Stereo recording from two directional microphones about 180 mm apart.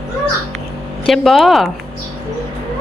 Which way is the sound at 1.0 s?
Centre (ahead or behind).